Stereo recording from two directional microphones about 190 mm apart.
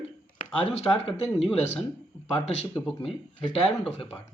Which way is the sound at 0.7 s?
35° left (ahead or behind).